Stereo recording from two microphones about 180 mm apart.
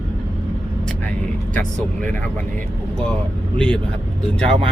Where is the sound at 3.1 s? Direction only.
5° left (ahead or behind).